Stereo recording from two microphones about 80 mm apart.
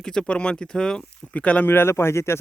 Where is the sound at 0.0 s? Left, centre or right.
Centre.